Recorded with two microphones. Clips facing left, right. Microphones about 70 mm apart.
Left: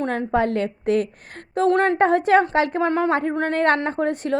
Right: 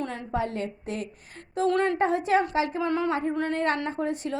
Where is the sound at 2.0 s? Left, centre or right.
Left.